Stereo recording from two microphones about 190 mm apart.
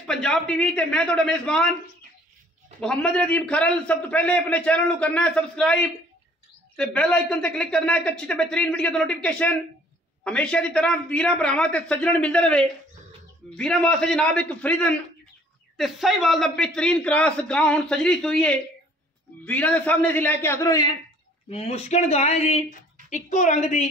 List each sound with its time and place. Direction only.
0.0 s a man's voice: 5° left (ahead or behind)
2.8 s a man's voice: 5° left (ahead or behind)
21.5 s speech: 35° left (ahead or behind)